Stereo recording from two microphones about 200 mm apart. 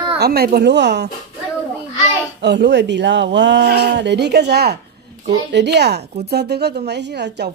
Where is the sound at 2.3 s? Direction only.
60° right (ahead or behind).